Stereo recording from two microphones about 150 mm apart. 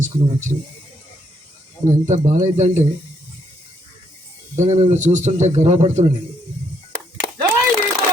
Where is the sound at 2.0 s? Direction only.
55° right (ahead or behind).